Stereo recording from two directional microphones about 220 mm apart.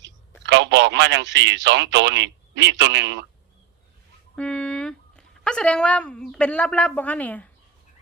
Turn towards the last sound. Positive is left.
turn(degrees=5)  # may be behind; listen again after turning